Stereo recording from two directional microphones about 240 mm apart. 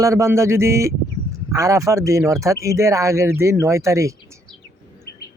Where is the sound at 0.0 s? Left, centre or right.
Centre.